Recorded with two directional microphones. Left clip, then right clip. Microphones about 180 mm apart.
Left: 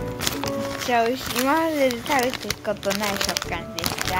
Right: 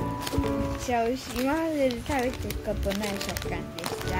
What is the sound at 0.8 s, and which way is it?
Speech, 10° right (ahead or behind).